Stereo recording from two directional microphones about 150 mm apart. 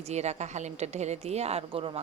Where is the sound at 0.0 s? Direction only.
50° right (ahead or behind).